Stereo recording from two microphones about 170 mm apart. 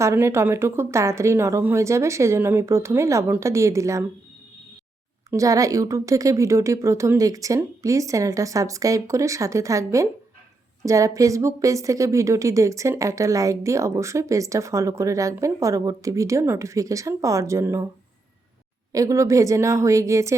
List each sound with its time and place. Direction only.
0.0 s a woman's voice: 15° right (ahead or behind)
5.3 s speech: 20° right (ahead or behind)
18.9 s speech: 20° right (ahead or behind)